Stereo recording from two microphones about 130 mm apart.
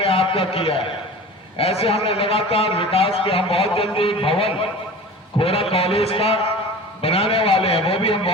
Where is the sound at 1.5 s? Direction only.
45° left (ahead or behind).